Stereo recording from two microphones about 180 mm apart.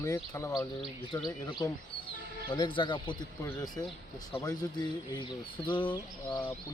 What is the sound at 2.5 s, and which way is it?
A man's voice, 30° left (ahead or behind).